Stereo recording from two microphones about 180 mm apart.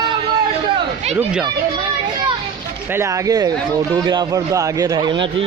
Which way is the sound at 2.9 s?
15° right (ahead or behind).